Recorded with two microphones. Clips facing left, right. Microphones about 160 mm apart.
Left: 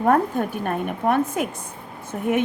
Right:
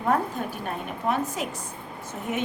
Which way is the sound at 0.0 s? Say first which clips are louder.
Left 6 dB; 55° left (ahead or behind).